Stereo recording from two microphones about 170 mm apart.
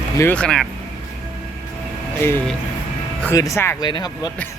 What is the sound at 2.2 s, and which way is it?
Speech, 10° left (ahead or behind).